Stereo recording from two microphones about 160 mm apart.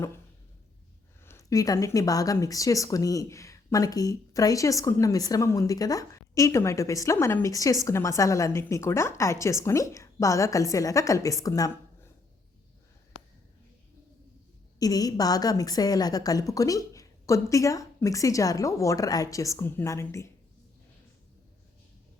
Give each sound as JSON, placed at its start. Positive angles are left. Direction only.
{"t": 1.2, "sound": "speech", "side_deg": 15}
{"t": 14.8, "sound": "speech", "side_deg": 25}